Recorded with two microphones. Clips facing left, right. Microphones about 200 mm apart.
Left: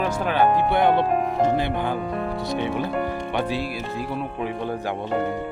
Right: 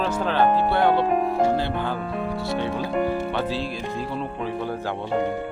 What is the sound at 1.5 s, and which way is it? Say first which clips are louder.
Speech: left 1 dB; 15° left (ahead or behind).